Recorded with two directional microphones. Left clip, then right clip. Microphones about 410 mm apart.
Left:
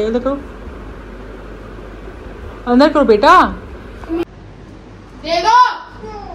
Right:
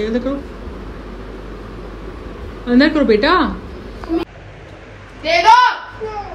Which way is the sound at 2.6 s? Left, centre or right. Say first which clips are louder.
Left 3 dB; centre.